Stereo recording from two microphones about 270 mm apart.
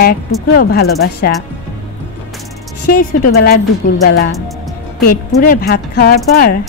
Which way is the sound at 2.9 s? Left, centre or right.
Left.